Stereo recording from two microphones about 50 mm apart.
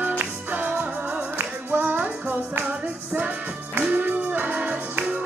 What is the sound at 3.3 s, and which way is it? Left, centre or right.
Music, right.